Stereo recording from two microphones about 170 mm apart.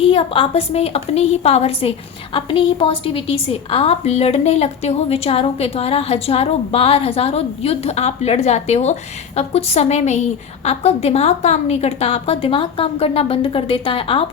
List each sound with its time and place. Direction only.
0.0 s a woman's voice: 30° left (ahead or behind)